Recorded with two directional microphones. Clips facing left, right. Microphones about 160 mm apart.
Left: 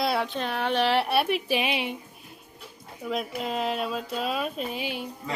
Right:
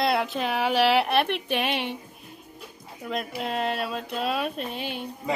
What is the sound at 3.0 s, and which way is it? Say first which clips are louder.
A woman's voice: left 1 dB; centre (ahead or behind).